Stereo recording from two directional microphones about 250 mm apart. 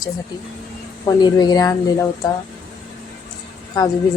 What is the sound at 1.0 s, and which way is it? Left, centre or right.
Speech, centre.